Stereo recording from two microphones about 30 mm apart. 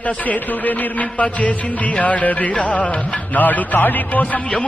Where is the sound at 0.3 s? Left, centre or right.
Left.